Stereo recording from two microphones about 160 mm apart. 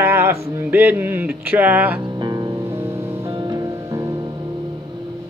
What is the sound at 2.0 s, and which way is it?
Music, 25° right (ahead or behind).